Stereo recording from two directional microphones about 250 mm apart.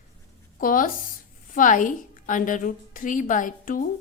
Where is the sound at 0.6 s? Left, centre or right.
Left.